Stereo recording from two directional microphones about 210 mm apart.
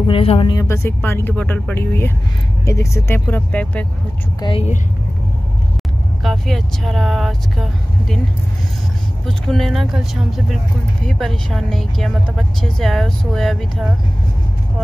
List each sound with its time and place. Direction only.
0.0 s speech: 25° left (ahead or behind); by 3.8 s 10° left (ahead or behind)
4.4 s a woman's voice: 25° left (ahead or behind)
6.2 s speech: centre (ahead or behind)
9.2 s speech: centre (ahead or behind)